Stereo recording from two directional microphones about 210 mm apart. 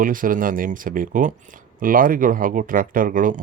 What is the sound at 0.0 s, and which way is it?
Speech, 40° right (ahead or behind).